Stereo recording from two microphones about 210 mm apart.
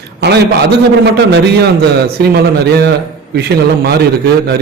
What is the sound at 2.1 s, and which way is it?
Speech, 50° right (ahead or behind).